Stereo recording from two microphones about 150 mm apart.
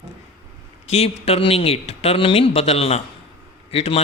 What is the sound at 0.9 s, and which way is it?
A man's voice, 45° left (ahead or behind).